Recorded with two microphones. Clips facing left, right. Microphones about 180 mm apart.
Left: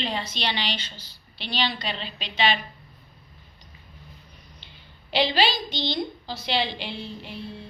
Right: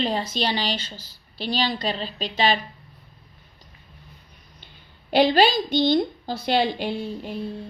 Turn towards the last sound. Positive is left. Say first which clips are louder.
# right 6 dB
turn(degrees=-45)  # may be behind; listen again after turning